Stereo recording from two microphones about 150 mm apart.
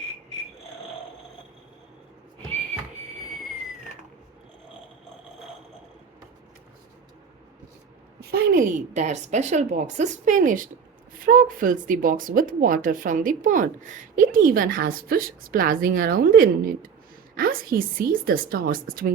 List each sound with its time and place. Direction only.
8.2 s a woman's voice: 90° right; by 19.1 s 70° right (ahead or behind)